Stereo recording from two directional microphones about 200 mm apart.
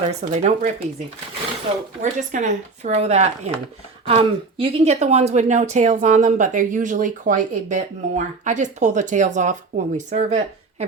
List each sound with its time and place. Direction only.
0.2 s a woman's voice: 35° right (ahead or behind)
2.0 s a woman's voice: 40° right (ahead or behind)